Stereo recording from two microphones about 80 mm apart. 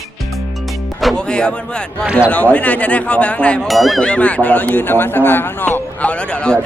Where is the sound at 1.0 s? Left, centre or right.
Centre.